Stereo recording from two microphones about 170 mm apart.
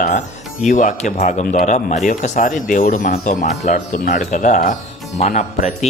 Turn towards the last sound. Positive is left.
turn(degrees=40)  # may be behind; listen again after turning